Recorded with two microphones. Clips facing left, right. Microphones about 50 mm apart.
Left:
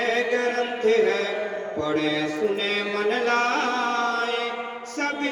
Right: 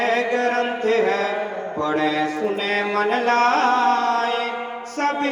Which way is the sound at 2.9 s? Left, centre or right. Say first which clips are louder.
Right 3 dB; right.